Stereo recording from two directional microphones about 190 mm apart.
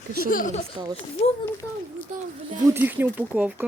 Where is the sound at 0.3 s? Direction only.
45° left (ahead or behind).